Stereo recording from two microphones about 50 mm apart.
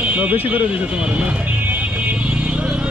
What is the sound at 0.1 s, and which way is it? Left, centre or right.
Speech, right.